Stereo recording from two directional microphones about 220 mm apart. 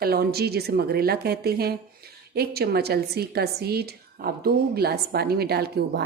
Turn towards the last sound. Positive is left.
turn(degrees=-45)  # may be behind; listen again after turning